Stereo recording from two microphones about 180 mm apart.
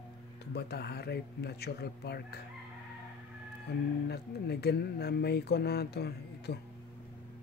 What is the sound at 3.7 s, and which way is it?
Speech, 65° left (ahead or behind).